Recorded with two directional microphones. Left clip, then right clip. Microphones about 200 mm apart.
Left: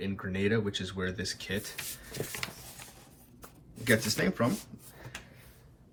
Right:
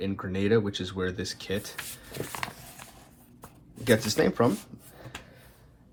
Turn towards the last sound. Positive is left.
turn(degrees=-20)  # may be behind; listen again after turning